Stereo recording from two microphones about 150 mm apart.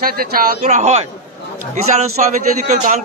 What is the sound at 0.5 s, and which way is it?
Speech, 50° right (ahead or behind).